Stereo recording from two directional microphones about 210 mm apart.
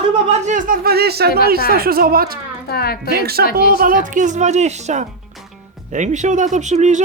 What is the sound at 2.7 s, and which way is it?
Speech, 45° left (ahead or behind).